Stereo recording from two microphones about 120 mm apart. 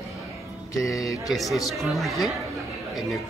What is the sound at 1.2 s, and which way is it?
Speech, centre (ahead or behind).